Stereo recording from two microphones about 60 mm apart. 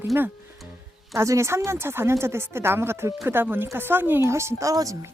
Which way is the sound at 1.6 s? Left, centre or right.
Right.